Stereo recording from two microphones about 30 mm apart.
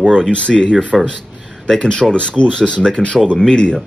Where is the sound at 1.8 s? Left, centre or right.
Left.